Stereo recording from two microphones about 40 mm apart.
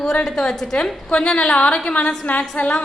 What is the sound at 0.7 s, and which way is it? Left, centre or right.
A woman's voice, left.